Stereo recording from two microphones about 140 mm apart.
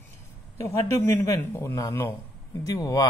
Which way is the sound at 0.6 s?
20° left (ahead or behind).